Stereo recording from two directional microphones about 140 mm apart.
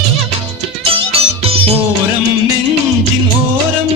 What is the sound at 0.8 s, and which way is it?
Music, 45° right (ahead or behind).